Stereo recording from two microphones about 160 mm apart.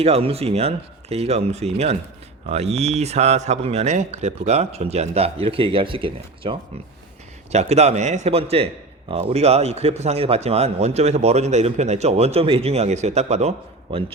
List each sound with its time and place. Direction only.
0.0 s a man's voice: 40° right (ahead or behind)